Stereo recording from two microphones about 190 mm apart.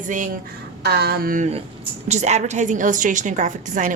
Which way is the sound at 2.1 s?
35° right (ahead or behind).